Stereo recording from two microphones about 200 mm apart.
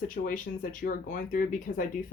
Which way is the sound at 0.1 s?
40° left (ahead or behind).